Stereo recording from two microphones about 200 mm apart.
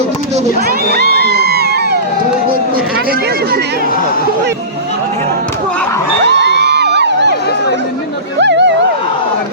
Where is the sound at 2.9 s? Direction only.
50° right (ahead or behind).